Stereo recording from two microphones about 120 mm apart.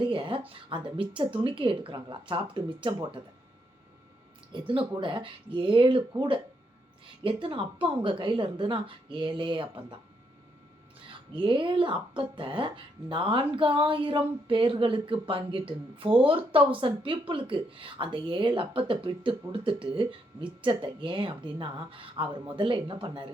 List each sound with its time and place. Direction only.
0.0 s a woman's voice: 45° right (ahead or behind)
4.5 s a woman's voice: 45° right (ahead or behind)
11.3 s a woman's voice: 45° right (ahead or behind)